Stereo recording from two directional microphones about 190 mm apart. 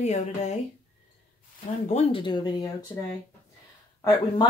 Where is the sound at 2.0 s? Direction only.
30° left (ahead or behind).